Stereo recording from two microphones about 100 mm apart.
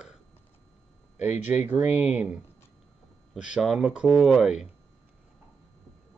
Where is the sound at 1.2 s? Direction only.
20° right (ahead or behind).